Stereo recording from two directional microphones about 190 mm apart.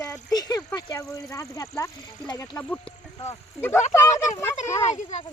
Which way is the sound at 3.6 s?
10° left (ahead or behind).